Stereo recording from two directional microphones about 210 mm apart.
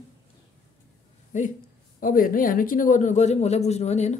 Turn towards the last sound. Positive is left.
turn(degrees=30)  # may be behind; listen again after turning